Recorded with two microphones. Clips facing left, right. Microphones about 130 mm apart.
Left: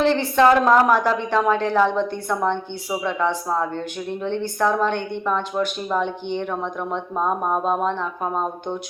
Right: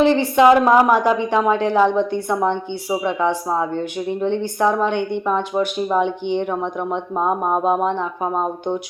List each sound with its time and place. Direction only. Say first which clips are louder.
0.0 s speech: right 3 dB; 15° right (ahead or behind)